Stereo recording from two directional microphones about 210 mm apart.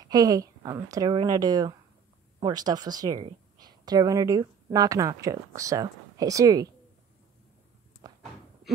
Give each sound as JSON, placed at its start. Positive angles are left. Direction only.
{"t": 0.0, "sound": "a woman's voice", "side_deg": -15}
{"t": 8.0, "sound": "door", "side_deg": -20}